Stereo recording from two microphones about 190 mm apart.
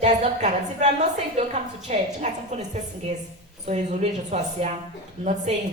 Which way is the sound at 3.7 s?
40° right (ahead or behind).